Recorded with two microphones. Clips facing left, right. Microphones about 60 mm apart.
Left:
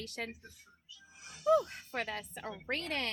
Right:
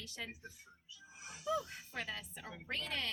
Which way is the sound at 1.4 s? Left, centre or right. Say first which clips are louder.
Left 10 dB; left.